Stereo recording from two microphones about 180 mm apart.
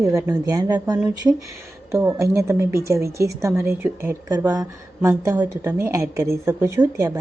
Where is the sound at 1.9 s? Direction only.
15° right (ahead or behind).